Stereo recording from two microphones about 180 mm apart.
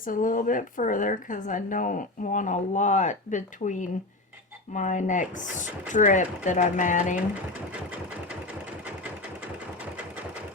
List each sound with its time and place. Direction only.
0.0 s a woman's voice: 50° left (ahead or behind)